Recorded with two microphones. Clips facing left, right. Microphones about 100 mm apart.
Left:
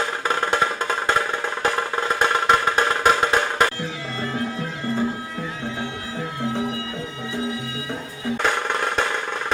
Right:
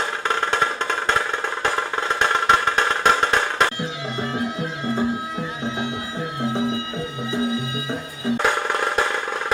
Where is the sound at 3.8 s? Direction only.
20° right (ahead or behind).